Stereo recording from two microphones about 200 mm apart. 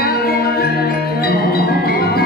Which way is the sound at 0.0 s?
50° left (ahead or behind).